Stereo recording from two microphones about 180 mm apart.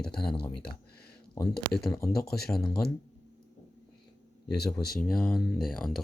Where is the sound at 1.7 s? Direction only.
5° left (ahead or behind).